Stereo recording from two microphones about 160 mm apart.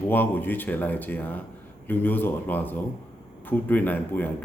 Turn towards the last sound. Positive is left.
turn(degrees=10)  # may be behind; listen again after turning